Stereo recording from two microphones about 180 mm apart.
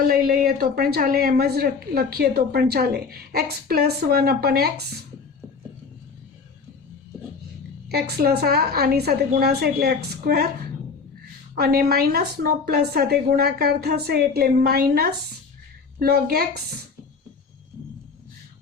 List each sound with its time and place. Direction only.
0.1 s a woman's voice: 60° right (ahead or behind)
7.9 s a woman's voice: 60° right (ahead or behind)
11.5 s a woman's voice: 60° right (ahead or behind)